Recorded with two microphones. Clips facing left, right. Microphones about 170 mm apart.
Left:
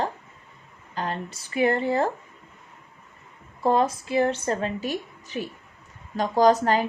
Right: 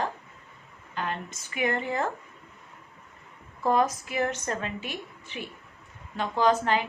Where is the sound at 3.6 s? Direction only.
30° left (ahead or behind).